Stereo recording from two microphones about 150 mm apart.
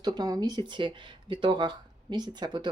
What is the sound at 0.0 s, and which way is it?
Speech, 25° right (ahead or behind).